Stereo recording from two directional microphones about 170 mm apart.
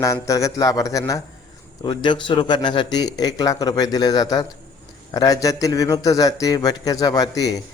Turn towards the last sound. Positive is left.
turn(degrees=20)  # may be behind; listen again after turning